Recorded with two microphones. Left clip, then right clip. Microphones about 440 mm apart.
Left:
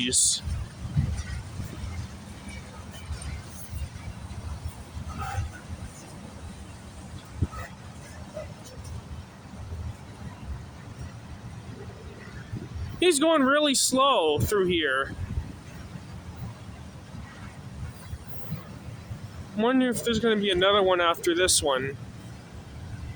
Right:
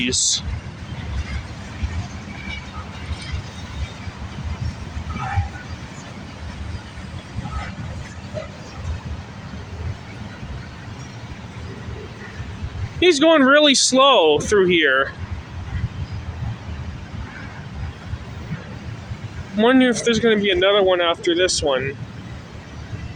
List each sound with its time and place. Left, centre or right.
0.0 s speech: left
13.0 s speech: left
19.5 s speech: left